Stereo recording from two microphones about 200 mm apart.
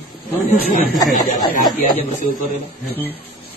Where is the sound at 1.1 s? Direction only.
45° left (ahead or behind).